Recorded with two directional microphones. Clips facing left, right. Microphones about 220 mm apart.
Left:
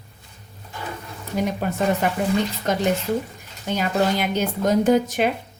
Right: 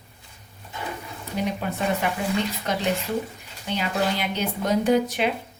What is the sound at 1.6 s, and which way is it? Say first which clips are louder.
Speech: left 6 dB; 45° left (ahead or behind).